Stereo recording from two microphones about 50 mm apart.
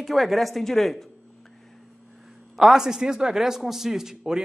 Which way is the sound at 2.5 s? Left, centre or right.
Centre.